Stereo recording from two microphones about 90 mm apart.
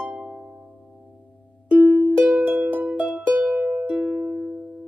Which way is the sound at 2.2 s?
15° right (ahead or behind).